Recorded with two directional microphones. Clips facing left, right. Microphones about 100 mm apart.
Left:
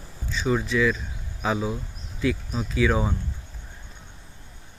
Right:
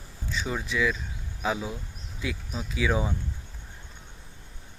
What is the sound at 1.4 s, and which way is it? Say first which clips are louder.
Speech: left 3 dB; 40° left (ahead or behind).